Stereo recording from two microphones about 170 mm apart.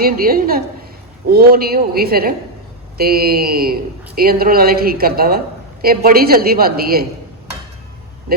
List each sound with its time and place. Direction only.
0.0 s a woman's voice: 60° right (ahead or behind)